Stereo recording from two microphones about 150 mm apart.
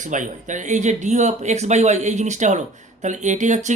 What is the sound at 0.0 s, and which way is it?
Speech, 55° right (ahead or behind).